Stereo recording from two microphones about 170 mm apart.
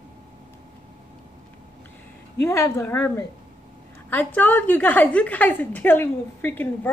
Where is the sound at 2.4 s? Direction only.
15° left (ahead or behind).